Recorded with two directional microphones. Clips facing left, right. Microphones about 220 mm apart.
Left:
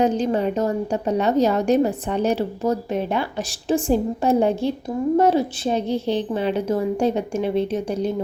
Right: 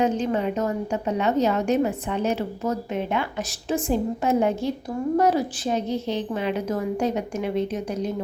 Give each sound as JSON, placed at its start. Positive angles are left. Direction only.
{"t": 0.0, "sound": "a woman's voice", "side_deg": 35}